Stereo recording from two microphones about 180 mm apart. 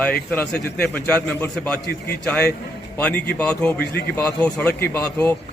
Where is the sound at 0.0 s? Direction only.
5° left (ahead or behind).